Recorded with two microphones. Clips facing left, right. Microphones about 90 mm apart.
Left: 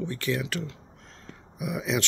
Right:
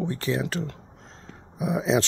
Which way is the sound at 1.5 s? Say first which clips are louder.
Right 6 dB; 30° right (ahead or behind).